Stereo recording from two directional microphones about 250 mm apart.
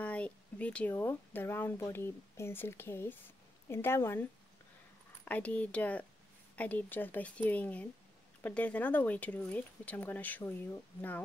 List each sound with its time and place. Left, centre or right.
0.0 s speech: centre